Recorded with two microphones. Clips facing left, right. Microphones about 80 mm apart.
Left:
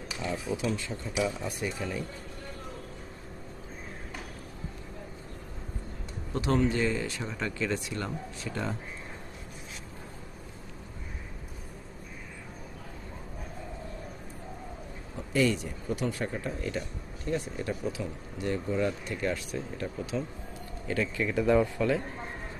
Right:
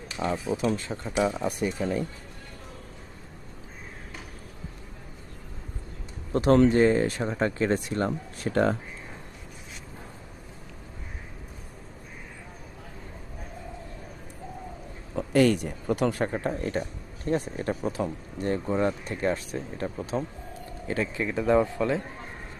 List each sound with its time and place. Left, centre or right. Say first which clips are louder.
0.5 s speech: right 4 dB; right
6.3 s speech: right 8 dB; right
15.3 s a man's voice: right 5 dB; right